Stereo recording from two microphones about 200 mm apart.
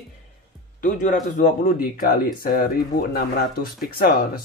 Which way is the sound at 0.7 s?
40° left (ahead or behind).